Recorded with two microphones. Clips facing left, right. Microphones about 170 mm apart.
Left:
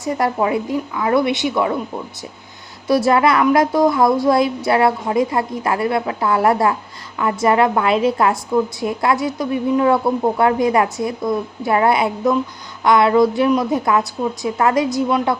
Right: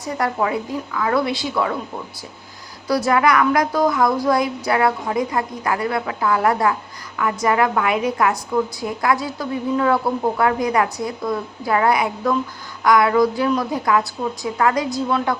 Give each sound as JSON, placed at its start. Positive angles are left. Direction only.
{"t": 0.0, "sound": "a woman's voice", "side_deg": 20}
{"t": 2.8, "sound": "a woman's voice", "side_deg": 25}